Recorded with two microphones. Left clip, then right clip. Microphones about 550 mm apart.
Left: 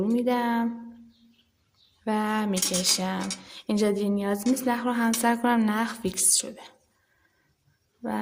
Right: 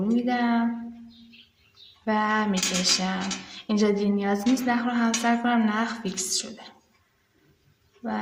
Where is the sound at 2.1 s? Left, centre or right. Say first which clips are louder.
Right 3 dB; left.